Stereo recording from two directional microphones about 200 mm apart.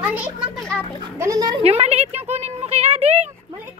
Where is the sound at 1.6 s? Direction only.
30° right (ahead or behind).